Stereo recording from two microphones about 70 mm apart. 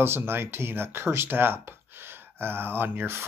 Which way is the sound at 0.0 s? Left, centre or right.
Right.